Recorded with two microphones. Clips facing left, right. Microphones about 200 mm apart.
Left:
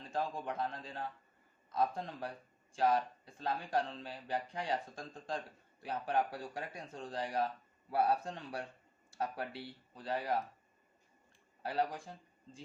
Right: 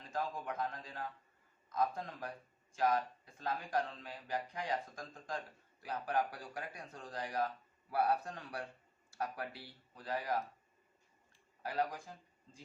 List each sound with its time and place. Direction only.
0.0 s speech: 30° left (ahead or behind)
11.6 s speech: 30° left (ahead or behind)